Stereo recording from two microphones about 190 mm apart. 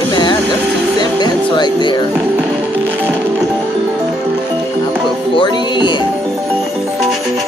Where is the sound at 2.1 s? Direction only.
10° right (ahead or behind).